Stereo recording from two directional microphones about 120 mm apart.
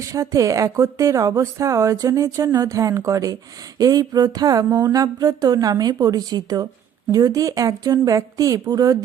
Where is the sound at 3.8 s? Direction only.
30° right (ahead or behind).